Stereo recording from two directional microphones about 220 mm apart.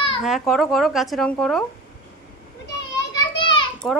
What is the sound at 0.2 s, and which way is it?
Speech, centre (ahead or behind).